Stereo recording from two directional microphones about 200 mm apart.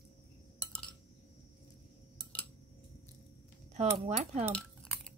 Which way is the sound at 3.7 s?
35° right (ahead or behind).